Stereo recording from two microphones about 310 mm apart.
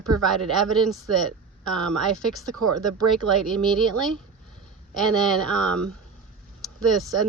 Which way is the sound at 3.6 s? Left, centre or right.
Centre.